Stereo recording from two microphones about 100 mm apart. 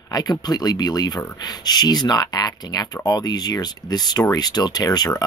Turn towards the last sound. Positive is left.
turn(degrees=40)  # may be behind; listen again after turning